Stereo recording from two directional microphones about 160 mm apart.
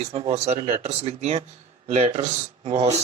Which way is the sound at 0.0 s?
40° right (ahead or behind).